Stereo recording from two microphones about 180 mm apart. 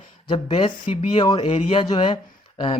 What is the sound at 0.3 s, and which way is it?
Speech, 30° left (ahead or behind).